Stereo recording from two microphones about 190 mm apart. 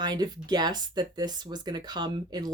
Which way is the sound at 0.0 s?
20° right (ahead or behind).